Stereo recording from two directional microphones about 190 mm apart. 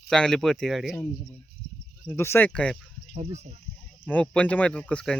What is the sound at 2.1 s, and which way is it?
Speech, 15° left (ahead or behind).